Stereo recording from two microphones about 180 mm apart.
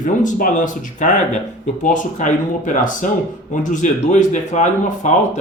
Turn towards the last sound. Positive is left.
turn(degrees=40)  # may be behind; listen again after turning